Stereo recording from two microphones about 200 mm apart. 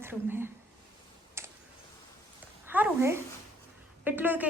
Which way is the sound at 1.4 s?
10° right (ahead or behind).